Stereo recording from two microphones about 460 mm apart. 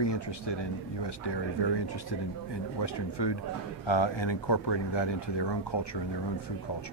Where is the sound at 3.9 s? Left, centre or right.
Left.